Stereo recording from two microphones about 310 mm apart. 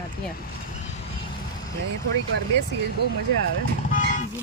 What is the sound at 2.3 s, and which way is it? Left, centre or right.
Speech, right.